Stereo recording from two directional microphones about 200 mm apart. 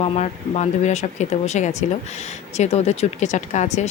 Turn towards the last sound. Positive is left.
turn(degrees=35)  # may be behind; listen again after turning